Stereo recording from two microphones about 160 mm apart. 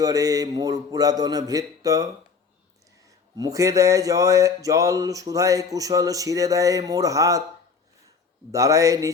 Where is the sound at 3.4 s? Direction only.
20° right (ahead or behind).